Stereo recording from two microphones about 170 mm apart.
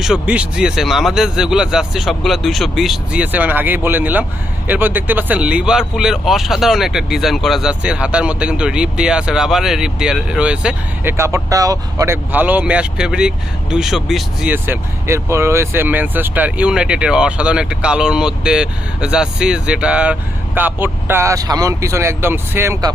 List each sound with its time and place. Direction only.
0.0 s speech: 5° right (ahead or behind)
11.2 s speech: 15° right (ahead or behind); by 14.5 s centre (ahead or behind)
14.5 s speech: 15° right (ahead or behind)